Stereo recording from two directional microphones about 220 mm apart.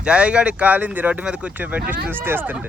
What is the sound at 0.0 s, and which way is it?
Speech, 5° right (ahead or behind).